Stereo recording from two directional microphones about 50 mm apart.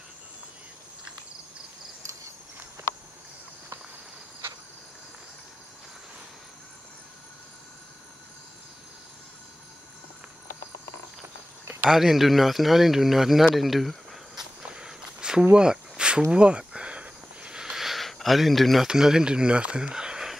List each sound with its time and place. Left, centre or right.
11.9 s speech: centre
14.7 s walk: centre
15.5 s a sound: centre
18.9 s speech: centre